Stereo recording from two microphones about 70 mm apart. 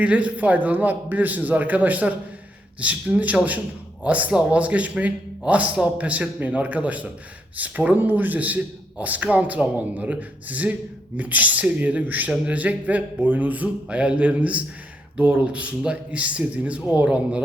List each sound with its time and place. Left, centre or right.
0.0 s a man's voice: centre